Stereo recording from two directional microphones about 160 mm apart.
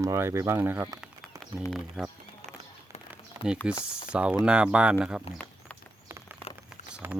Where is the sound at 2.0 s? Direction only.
Centre (ahead or behind).